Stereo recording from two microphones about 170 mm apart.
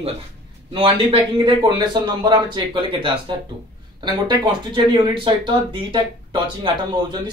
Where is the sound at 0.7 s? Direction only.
35° right (ahead or behind).